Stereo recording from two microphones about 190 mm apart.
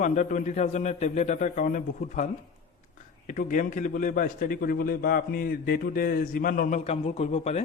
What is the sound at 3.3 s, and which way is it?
A man's voice, 45° left (ahead or behind).